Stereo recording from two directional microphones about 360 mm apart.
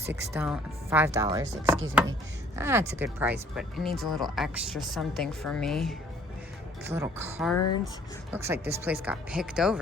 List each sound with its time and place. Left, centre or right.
0.1 s chopping: centre
3.0 s speech: centre
6.8 s chopping: centre
7.5 s speech: left
8.3 s speech: centre